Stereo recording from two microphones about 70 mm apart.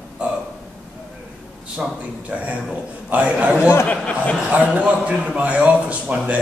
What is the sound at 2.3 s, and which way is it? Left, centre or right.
A man's voice, centre.